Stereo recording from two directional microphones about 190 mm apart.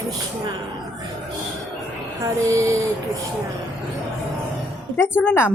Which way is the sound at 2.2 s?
15° right (ahead or behind).